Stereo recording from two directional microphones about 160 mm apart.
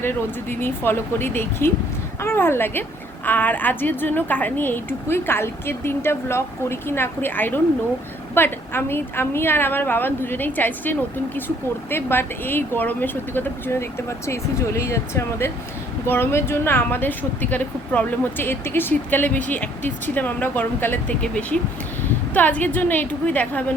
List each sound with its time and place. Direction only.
0.6 s speech: 15° left (ahead or behind)